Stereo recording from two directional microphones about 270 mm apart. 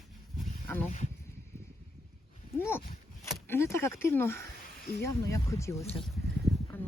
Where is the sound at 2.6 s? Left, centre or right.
Centre.